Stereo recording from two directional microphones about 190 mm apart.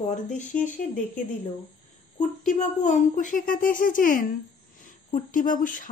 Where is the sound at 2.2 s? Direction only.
40° left (ahead or behind).